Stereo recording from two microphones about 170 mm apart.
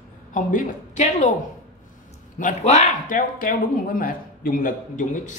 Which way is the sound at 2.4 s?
45° left (ahead or behind).